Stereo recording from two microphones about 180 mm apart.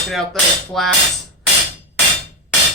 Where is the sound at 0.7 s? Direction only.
Centre (ahead or behind).